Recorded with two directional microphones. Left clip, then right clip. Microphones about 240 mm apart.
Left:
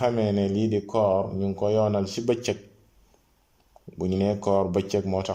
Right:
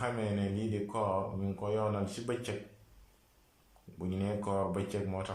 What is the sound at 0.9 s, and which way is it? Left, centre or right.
Speech, left.